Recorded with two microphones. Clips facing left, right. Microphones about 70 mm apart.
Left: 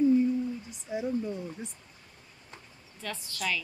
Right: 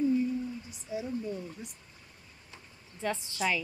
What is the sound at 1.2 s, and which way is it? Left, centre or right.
Speech, left.